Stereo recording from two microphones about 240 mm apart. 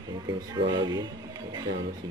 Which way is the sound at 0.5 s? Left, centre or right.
Centre.